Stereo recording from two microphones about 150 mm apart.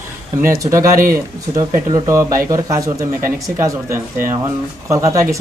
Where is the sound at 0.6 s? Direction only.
20° right (ahead or behind).